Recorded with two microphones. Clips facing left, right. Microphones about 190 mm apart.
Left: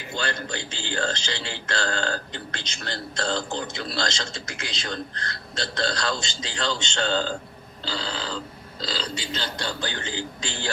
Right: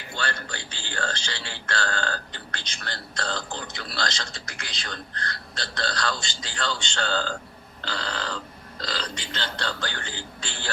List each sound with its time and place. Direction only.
0.2 s speech: 25° left (ahead or behind)
7.9 s a man's voice: 10° left (ahead or behind)